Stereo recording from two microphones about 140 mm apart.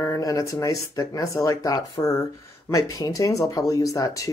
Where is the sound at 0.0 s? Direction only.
25° left (ahead or behind).